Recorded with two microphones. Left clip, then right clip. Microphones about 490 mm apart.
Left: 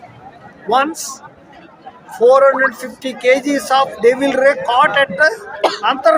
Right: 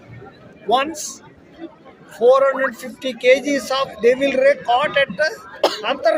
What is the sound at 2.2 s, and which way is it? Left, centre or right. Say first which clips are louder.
Speech: left 4 dB; right.